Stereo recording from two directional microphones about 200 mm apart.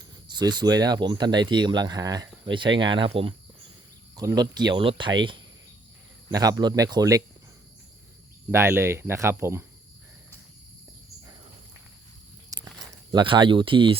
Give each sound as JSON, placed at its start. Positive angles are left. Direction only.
{"t": 0.0, "sound": "speech", "side_deg": -20}
{"t": 4.1, "sound": "speech", "side_deg": -15}
{"t": 8.4, "sound": "speech", "side_deg": -10}
{"t": 12.5, "sound": "a sound", "side_deg": -20}